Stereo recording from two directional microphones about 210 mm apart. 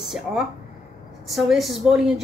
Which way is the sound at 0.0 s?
Centre (ahead or behind).